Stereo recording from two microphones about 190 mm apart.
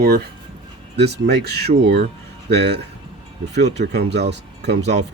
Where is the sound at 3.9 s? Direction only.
60° right (ahead or behind).